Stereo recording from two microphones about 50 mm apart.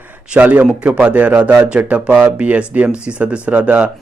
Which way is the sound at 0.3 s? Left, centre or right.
Right.